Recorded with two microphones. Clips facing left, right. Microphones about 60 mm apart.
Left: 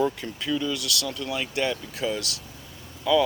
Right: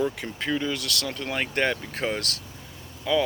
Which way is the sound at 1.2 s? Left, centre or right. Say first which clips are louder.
Right 3 dB; right.